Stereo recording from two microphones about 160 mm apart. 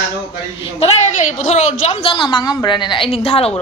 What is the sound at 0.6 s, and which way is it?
A woman's voice, 40° left (ahead or behind).